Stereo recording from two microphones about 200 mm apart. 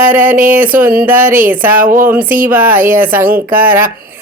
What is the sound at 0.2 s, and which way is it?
Speech, 40° right (ahead or behind).